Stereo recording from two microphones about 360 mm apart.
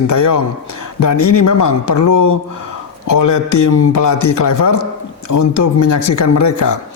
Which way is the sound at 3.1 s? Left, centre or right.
Left.